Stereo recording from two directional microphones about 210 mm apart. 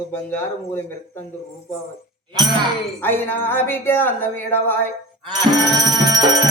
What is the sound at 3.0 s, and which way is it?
Speech, 10° left (ahead or behind).